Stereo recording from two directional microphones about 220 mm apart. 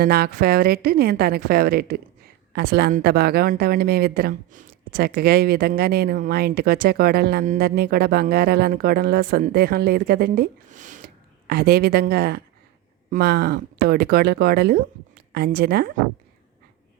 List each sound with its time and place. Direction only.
0.0 s speech: 45° right (ahead or behind)